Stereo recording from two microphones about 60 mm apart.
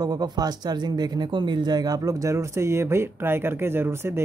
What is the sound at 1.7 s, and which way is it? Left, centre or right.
Speech, right.